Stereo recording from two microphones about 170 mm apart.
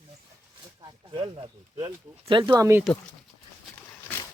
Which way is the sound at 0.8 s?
30° right (ahead or behind).